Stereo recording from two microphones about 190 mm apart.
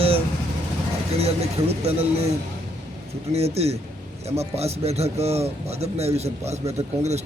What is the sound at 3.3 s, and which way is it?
Speech, 35° right (ahead or behind).